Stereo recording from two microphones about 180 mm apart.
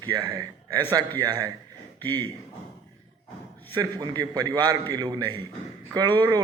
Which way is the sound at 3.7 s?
20° right (ahead or behind).